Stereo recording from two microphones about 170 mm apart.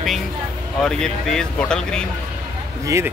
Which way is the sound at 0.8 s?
5° left (ahead or behind).